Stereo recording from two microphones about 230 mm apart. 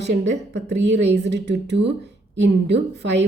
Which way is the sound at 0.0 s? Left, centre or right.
Right.